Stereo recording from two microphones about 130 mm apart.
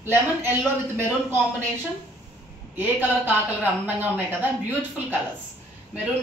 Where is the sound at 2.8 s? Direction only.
15° right (ahead or behind).